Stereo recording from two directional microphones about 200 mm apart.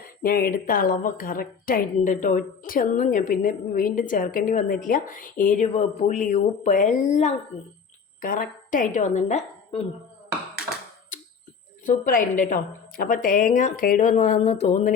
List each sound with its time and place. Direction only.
0.2 s a woman's voice: 45° left (ahead or behind)
11.9 s a woman's voice: 45° left (ahead or behind)